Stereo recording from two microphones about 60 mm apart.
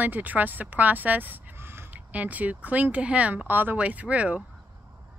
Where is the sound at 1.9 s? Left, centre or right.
Right.